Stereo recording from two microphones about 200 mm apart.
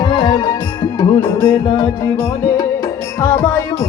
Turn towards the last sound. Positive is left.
turn(degrees=10)  # may be behind; listen again after turning